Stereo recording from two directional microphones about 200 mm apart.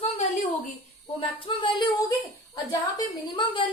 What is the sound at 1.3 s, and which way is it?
Speech, 25° left (ahead or behind).